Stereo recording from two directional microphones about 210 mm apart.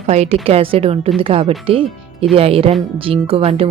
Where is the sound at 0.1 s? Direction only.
30° right (ahead or behind).